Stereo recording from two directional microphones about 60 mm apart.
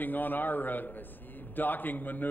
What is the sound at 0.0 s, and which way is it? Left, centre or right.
A man's voice, left.